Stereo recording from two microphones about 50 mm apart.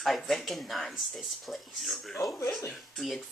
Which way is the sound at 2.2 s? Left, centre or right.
Left.